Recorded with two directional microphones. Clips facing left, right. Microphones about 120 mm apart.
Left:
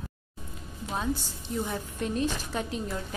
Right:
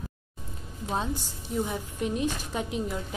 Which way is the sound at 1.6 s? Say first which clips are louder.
Right 1 dB; 15° right (ahead or behind).